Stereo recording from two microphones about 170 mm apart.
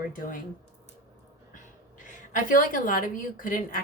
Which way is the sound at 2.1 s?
50° left (ahead or behind).